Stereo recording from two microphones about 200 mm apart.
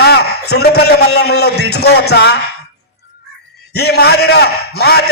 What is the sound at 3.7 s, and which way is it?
A man's voice, 55° left (ahead or behind).